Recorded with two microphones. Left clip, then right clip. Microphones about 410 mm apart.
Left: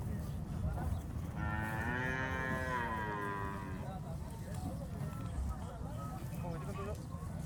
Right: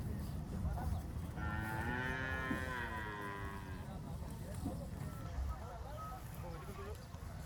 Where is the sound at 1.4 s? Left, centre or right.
Centre.